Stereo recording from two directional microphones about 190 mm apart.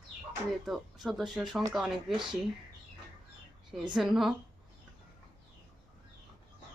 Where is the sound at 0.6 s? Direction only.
Centre (ahead or behind).